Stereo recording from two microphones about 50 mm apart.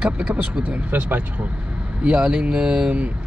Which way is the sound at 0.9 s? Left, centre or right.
Right.